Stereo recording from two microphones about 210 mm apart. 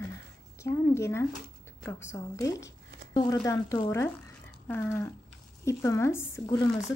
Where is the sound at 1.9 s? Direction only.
10° left (ahead or behind).